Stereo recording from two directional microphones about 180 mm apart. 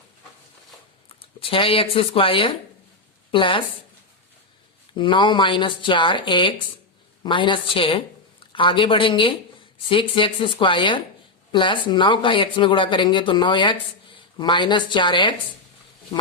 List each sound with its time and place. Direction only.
1.0 s speech: 30° left (ahead or behind)
4.9 s speech: 25° left (ahead or behind)